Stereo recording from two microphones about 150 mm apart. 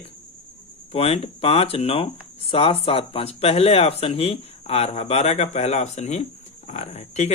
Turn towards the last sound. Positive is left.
turn(degrees=45)  # may be behind; listen again after turning